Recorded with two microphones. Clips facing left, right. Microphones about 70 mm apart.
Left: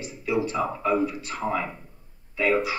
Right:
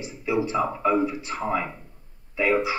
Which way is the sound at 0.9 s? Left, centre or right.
Right.